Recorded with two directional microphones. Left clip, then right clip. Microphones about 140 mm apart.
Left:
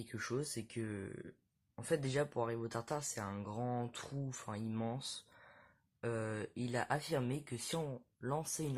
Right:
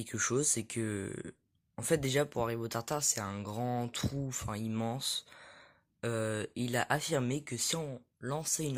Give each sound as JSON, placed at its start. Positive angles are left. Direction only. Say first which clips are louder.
{"t": 0.1, "sound": "speech", "louder": "right 9 dB", "side_deg": -45}